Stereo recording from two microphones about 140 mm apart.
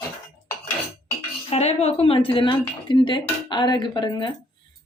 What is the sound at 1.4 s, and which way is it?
Speech, 50° left (ahead or behind).